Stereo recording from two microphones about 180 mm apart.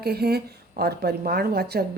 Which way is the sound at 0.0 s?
60° right (ahead or behind).